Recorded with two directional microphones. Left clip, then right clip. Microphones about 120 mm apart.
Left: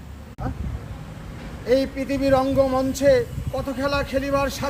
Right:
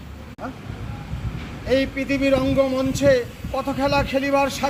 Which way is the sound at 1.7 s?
45° left (ahead or behind).